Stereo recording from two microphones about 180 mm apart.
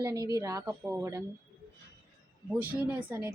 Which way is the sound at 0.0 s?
20° right (ahead or behind).